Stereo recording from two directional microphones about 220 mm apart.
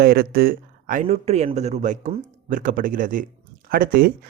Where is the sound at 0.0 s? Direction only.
45° right (ahead or behind).